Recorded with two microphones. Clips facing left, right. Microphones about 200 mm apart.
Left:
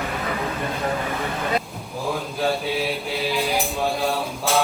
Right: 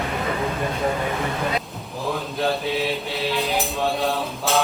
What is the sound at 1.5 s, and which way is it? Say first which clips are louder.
Mantra: left 2 dB; centre (ahead or behind).